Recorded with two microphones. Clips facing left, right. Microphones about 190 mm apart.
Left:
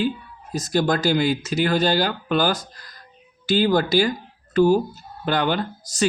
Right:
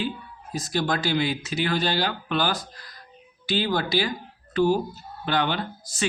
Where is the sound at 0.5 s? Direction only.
45° left (ahead or behind).